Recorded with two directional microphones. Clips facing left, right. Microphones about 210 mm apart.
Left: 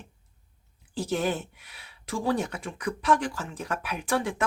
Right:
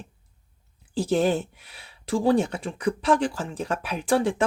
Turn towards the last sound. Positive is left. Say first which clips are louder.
# right 6 dB
turn(degrees=-30)  # may be behind; listen again after turning